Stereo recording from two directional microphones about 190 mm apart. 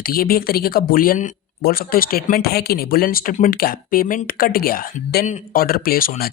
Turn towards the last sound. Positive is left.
turn(degrees=50)  # may be behind; listen again after turning